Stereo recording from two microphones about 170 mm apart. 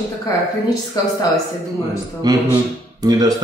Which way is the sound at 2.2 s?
25° right (ahead or behind).